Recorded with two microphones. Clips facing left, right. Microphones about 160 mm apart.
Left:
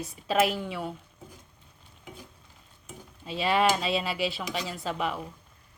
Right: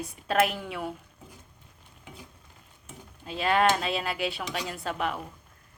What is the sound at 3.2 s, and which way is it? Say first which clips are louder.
Speech: right 1 dB; centre (ahead or behind).